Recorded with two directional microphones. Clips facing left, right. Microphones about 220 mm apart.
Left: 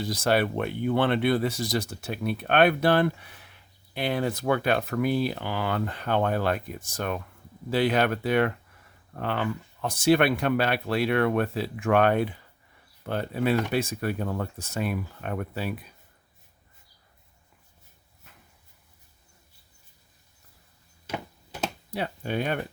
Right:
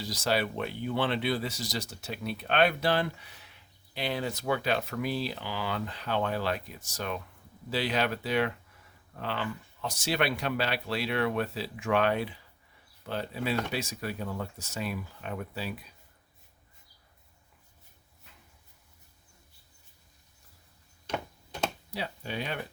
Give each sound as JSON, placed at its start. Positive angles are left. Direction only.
{"t": 0.0, "sound": "speech", "side_deg": 55}
{"t": 21.1, "sound": "a sound", "side_deg": 5}
{"t": 21.9, "sound": "speech", "side_deg": 55}